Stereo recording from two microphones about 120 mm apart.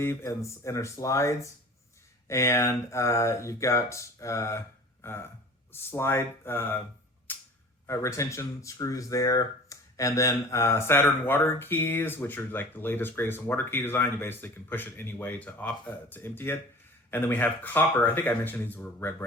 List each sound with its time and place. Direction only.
0.0 s speech: 20° left (ahead or behind)
7.3 s a sound: 15° left (ahead or behind)
7.9 s speech: 25° left (ahead or behind)